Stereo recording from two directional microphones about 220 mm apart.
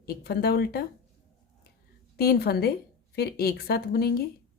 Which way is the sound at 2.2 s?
45° left (ahead or behind).